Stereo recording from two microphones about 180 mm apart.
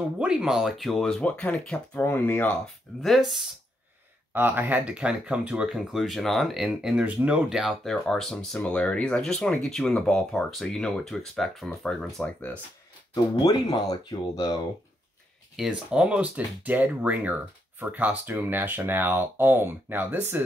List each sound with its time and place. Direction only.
0.0 s speech: 5° right (ahead or behind)
4.3 s speech: 10° right (ahead or behind); by 12.5 s 10° left (ahead or behind)
13.1 s speech: 20° left (ahead or behind)
15.5 s speech: 5° right (ahead or behind)